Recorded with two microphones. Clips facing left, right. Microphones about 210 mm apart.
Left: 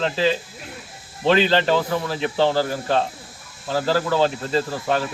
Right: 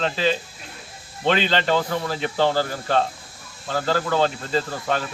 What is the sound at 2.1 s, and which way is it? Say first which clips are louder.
Speech: left 1 dB; 25° left (ahead or behind).